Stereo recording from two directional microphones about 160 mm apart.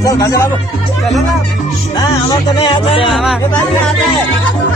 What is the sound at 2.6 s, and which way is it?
Music, 35° left (ahead or behind).